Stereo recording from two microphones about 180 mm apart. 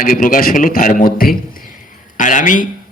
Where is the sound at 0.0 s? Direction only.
50° left (ahead or behind).